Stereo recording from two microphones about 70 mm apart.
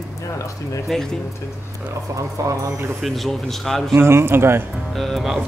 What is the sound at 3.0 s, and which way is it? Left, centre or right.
Speech, centre.